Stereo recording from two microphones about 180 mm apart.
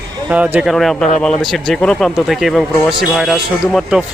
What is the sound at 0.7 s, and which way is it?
Speech, centre (ahead or behind).